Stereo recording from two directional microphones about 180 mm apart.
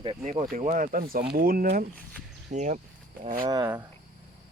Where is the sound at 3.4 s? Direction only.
20° right (ahead or behind).